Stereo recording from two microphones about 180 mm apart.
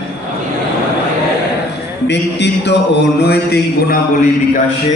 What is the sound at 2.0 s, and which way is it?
Mantra, 70° left (ahead or behind).